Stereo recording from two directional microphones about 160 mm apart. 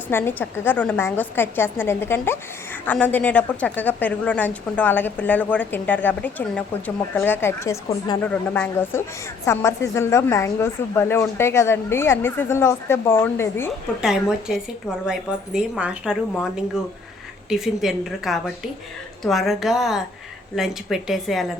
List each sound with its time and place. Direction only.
0.1 s a woman's voice: 15° left (ahead or behind)
8.2 s a woman's voice: 10° left (ahead or behind)
14.0 s a woman's voice: 5° right (ahead or behind)